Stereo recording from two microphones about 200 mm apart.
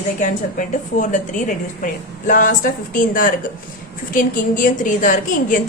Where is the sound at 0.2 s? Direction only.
40° left (ahead or behind).